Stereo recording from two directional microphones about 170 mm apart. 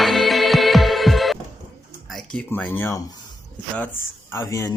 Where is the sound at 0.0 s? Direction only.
Centre (ahead or behind).